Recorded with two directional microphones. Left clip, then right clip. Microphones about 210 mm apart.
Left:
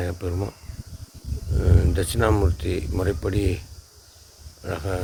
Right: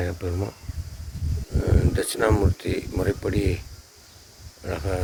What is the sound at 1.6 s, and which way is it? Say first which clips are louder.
Speech: even; 5° left (ahead or behind).